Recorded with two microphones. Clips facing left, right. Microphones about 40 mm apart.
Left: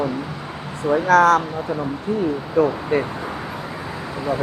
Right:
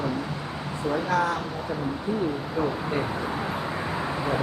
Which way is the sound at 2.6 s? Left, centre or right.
Left.